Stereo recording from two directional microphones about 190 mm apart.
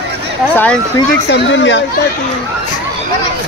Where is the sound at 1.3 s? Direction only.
70° left (ahead or behind).